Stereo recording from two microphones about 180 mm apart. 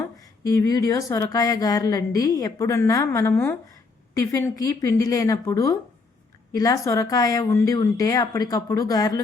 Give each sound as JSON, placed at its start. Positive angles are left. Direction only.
{"t": 0.0, "sound": "a woman's voice", "side_deg": 15}